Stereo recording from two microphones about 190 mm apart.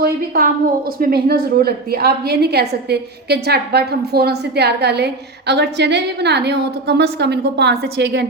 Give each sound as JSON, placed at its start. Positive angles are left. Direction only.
{"t": 0.0, "sound": "a woman's voice", "side_deg": -50}